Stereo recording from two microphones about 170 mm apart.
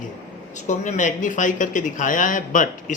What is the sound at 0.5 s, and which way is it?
Speech, 45° left (ahead or behind).